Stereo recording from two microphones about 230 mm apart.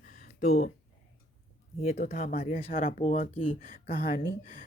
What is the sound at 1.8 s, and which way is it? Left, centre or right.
Speech, left.